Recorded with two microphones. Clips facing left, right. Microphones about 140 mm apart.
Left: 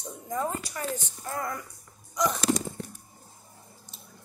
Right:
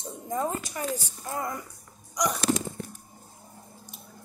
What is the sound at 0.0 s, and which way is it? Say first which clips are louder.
A woman's voice: right 1 dB; 20° right (ahead or behind).